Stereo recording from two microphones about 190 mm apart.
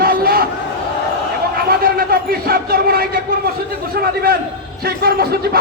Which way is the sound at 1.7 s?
50° right (ahead or behind).